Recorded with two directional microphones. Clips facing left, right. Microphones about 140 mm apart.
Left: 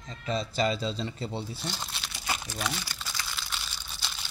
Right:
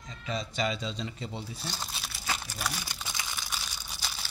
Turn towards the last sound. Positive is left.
turn(degrees=-5)  # may be behind; listen again after turning